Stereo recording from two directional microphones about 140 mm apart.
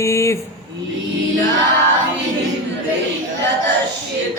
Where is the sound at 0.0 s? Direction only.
20° left (ahead or behind).